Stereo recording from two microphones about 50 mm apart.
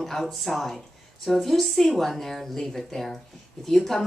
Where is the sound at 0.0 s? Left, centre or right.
Centre.